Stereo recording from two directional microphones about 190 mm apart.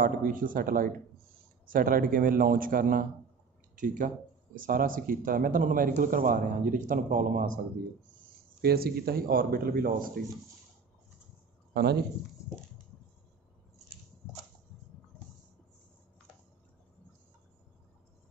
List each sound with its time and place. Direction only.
0.0 s speech: 45° right (ahead or behind)
11.7 s speech: 60° right (ahead or behind)